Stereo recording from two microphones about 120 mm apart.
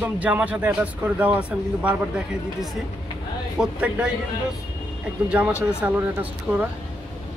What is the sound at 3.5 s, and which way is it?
Speech, 10° right (ahead or behind).